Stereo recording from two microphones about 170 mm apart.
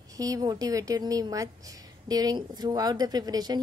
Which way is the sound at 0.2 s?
20° right (ahead or behind).